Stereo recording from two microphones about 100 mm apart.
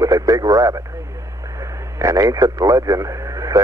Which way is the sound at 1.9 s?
30° right (ahead or behind).